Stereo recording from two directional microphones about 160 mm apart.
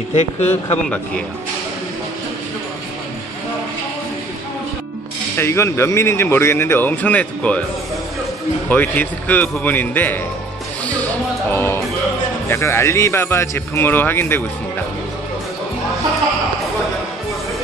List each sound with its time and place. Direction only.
0.1 s speech: 40° left (ahead or behind)
5.4 s speech: 15° left (ahead or behind)
8.6 s speech: 10° left (ahead or behind)
11.5 s speech: 15° left (ahead or behind)